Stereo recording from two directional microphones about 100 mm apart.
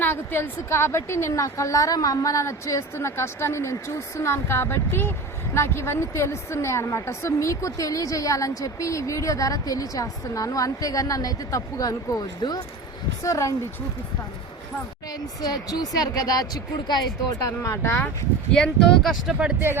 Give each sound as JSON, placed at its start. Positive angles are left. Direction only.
{"t": 0.0, "sound": "a woman's voice", "side_deg": 20}
{"t": 13.2, "sound": "a woman's voice", "side_deg": 30}
{"t": 15.4, "sound": "a woman's voice", "side_deg": 40}
{"t": 17.6, "sound": "a woman's voice", "side_deg": 25}
{"t": 18.5, "sound": "speech", "side_deg": 5}